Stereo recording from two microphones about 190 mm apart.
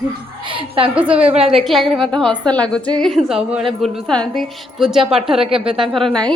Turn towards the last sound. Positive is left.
turn(degrees=5)  # may be behind; listen again after turning